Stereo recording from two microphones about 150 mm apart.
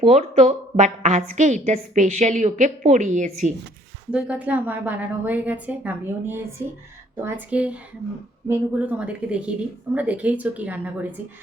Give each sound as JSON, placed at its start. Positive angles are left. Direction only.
{"t": 0.0, "sound": "a woman's voice", "side_deg": -50}
{"t": 4.1, "sound": "speech", "side_deg": -10}